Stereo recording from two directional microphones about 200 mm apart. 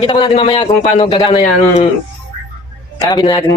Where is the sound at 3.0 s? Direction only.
20° left (ahead or behind).